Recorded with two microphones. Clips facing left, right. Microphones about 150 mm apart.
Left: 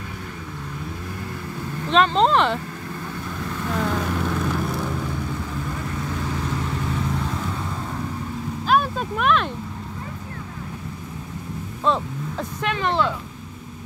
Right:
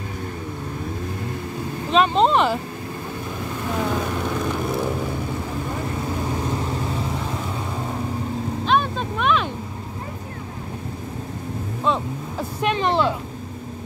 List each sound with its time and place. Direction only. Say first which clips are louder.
1.9 s speech: even; 5° right (ahead or behind)
3.6 s vehicle: even; 10° right (ahead or behind)
4.6 s vehicle: right 3 dB; 25° right (ahead or behind)
7.1 s vehicle: left 1 dB; 15° right (ahead or behind)
8.6 s a sound: left 1 dB; 5° left (ahead or behind)
11.8 s vehicle: left 1 dB; 5° right (ahead or behind)
12.6 s a sound: right 3 dB; 20° right (ahead or behind)